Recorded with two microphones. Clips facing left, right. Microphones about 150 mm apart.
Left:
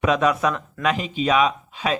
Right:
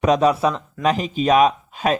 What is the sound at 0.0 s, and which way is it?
Speech, 35° right (ahead or behind).